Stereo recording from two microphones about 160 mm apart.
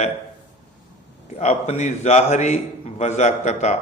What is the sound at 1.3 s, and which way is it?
A man's voice, 45° left (ahead or behind).